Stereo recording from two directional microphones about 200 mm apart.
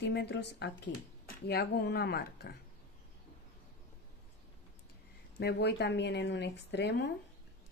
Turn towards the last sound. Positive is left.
turn(degrees=60)  # may be behind; listen again after turning